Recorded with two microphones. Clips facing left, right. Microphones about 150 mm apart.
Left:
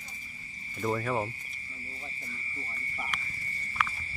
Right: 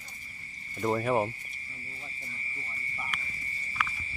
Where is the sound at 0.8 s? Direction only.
15° right (ahead or behind).